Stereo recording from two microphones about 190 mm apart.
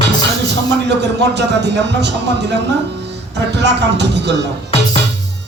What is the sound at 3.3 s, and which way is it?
Speech, 65° right (ahead or behind).